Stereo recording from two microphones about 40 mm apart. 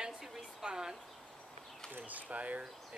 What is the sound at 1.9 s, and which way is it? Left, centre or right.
Speech, right.